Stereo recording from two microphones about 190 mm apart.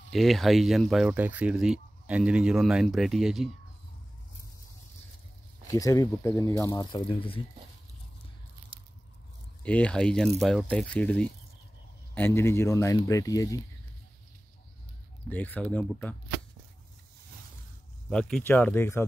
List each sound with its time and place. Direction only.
0.1 s speech: centre (ahead or behind)
5.7 s speech: 15° left (ahead or behind)
8.7 s biting: 30° right (ahead or behind)
9.6 s speech: 5° left (ahead or behind)
15.2 s speech: 10° left (ahead or behind)
18.1 s speech: 10° left (ahead or behind)